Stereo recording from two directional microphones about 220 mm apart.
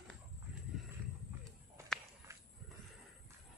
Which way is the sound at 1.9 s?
Centre (ahead or behind).